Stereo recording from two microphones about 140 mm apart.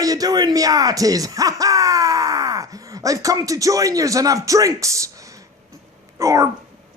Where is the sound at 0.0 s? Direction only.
25° right (ahead or behind).